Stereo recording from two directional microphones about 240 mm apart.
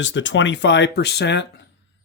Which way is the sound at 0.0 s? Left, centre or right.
Left.